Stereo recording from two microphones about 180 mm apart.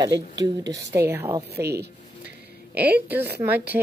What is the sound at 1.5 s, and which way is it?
Speech, 65° right (ahead or behind).